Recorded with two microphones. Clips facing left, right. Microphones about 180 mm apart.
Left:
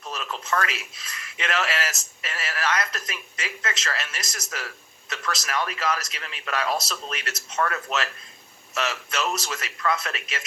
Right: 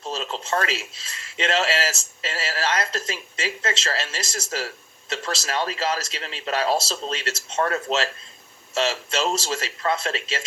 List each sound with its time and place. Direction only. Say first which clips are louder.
0.0 s speech: right 4 dB; 25° right (ahead or behind)